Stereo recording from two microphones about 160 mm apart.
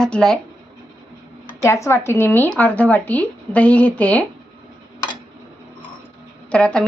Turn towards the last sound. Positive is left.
turn(degrees=5)  # may be behind; listen again after turning